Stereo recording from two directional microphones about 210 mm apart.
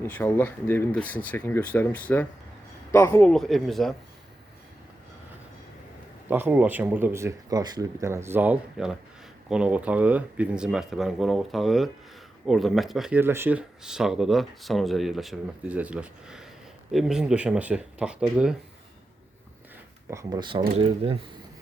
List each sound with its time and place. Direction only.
0.0 s speech: 10° left (ahead or behind)
6.2 s speech: 10° right (ahead or behind)
20.1 s speech: 15° right (ahead or behind)